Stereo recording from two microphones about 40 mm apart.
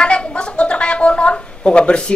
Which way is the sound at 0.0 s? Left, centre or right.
Left.